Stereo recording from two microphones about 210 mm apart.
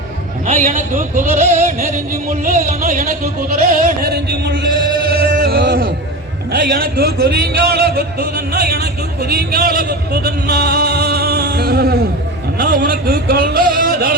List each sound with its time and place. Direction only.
0.4 s music: 35° right (ahead or behind)
3.7 s a man's voice: 45° right (ahead or behind)
5.0 s music: 45° right (ahead or behind)
6.5 s a man's voice: 45° right (ahead or behind)